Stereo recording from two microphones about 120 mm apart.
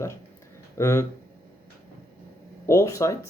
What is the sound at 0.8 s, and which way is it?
Speech, 20° left (ahead or behind).